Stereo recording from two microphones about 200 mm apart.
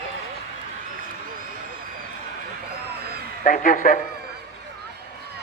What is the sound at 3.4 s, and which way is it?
Speech, 40° left (ahead or behind).